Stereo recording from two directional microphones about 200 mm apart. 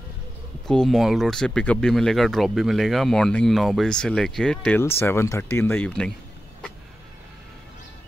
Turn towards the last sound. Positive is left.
turn(degrees=5)  # may be behind; listen again after turning